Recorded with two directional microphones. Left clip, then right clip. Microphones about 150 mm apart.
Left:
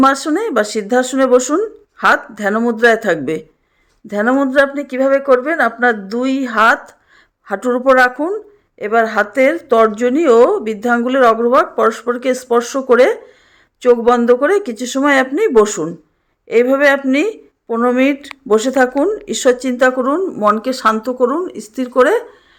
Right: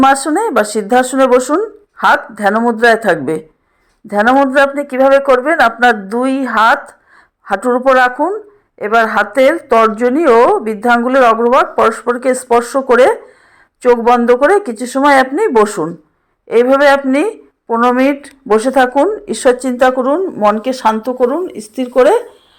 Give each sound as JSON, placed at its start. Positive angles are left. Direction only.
{"t": 0.0, "sound": "speech", "side_deg": 5}
{"t": 3.0, "sound": "speech", "side_deg": 5}
{"t": 5.5, "sound": "speech", "side_deg": 25}
{"t": 6.1, "sound": "speech", "side_deg": 10}
{"t": 9.3, "sound": "speech", "side_deg": 20}
{"t": 9.6, "sound": "speech", "side_deg": 10}
{"t": 15.4, "sound": "a woman's voice", "side_deg": 5}
{"t": 17.7, "sound": "speech", "side_deg": 15}
{"t": 20.6, "sound": "speech", "side_deg": 0}